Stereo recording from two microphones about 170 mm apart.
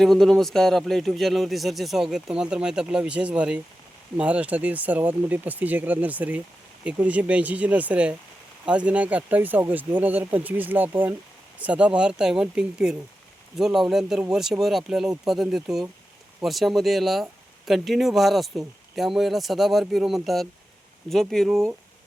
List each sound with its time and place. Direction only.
0.0 s speech: centre (ahead or behind)